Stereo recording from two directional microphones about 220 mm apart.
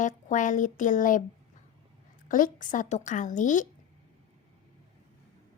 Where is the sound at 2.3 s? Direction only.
35° left (ahead or behind).